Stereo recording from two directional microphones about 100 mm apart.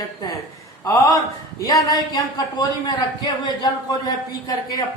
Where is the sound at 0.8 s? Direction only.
35° left (ahead or behind).